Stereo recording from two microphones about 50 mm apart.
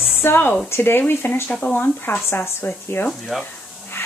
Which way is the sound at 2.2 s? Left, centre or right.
Left.